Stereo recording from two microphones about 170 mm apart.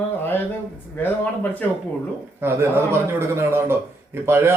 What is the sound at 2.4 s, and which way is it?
A man's voice, 15° right (ahead or behind).